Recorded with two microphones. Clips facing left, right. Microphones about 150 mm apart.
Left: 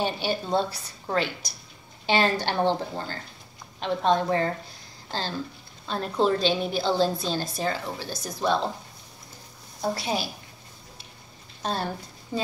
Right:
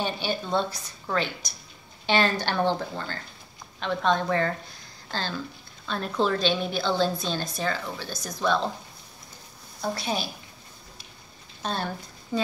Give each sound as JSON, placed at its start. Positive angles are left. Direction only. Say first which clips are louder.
{"t": 0.0, "sound": "a woman's voice", "louder": "left 2 dB", "side_deg": 35}
{"t": 2.0, "sound": "a woman's voice", "louder": "left 1 dB", "side_deg": 30}
{"t": 9.8, "sound": "a woman's voice", "louder": "left 1 dB", "side_deg": 30}
{"t": 11.6, "sound": "speech", "louder": "left 1 dB", "side_deg": 35}